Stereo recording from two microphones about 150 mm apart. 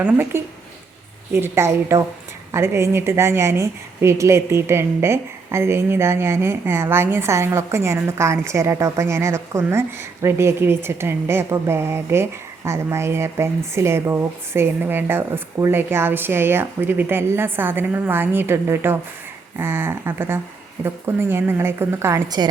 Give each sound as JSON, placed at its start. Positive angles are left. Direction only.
{"t": 0.0, "sound": "a woman's voice", "side_deg": -10}